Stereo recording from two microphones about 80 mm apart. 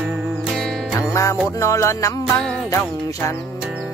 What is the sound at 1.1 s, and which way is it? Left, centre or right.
Music, left.